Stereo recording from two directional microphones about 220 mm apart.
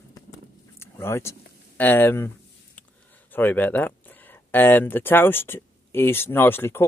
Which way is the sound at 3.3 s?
10° left (ahead or behind).